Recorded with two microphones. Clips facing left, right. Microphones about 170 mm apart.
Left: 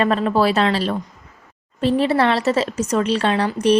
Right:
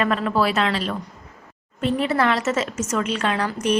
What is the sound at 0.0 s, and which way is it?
Speech, 30° left (ahead or behind).